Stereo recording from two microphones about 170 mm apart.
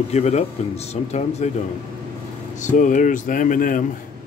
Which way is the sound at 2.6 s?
50° left (ahead or behind).